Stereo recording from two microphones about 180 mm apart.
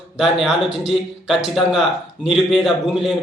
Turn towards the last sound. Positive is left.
turn(degrees=0)  # may be behind; listen again after turning